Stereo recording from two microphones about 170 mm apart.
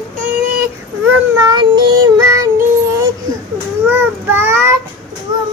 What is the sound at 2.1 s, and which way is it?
Music, 15° right (ahead or behind).